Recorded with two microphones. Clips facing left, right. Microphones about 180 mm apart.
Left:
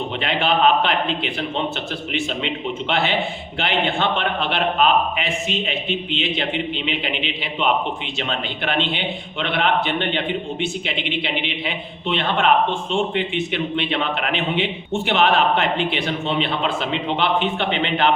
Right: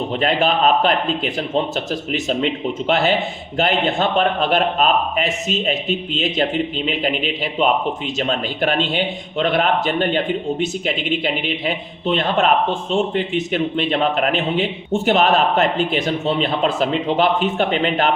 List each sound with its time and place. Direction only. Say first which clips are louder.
0.2 s a man's voice: right 1 dB; 40° right (ahead or behind)